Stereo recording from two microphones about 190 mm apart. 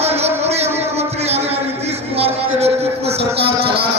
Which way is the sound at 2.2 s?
30° right (ahead or behind).